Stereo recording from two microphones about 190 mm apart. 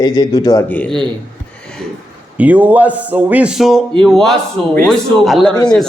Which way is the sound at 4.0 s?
Centre (ahead or behind).